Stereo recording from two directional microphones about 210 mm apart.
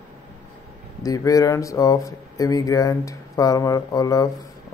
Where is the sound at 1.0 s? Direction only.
15° left (ahead or behind).